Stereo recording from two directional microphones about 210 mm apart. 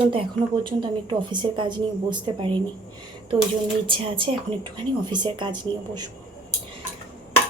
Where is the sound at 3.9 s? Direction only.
25° right (ahead or behind).